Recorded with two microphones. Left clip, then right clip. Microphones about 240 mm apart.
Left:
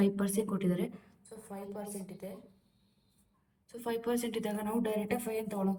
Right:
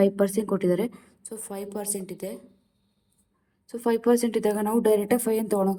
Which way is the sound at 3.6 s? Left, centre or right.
Right.